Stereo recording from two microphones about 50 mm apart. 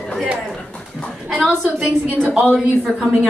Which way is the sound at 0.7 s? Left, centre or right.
Left.